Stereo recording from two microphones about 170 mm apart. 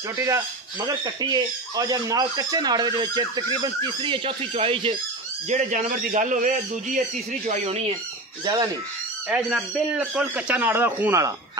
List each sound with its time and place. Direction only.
0.2 s speech: 20° right (ahead or behind)
5.5 s speech: 45° right (ahead or behind)
9.3 s speech: 5° right (ahead or behind)